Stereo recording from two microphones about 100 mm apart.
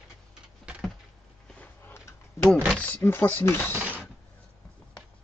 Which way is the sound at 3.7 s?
15° right (ahead or behind).